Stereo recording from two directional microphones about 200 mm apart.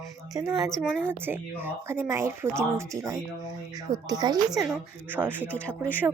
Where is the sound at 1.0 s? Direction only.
10° right (ahead or behind).